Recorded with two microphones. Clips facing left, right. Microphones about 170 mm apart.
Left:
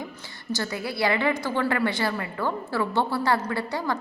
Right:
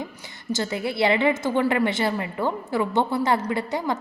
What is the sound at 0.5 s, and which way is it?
A woman's voice, 20° right (ahead or behind).